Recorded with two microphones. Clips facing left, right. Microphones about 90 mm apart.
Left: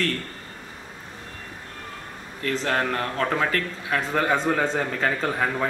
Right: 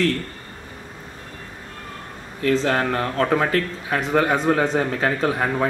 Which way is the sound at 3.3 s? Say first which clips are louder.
Right 4 dB; 20° right (ahead or behind).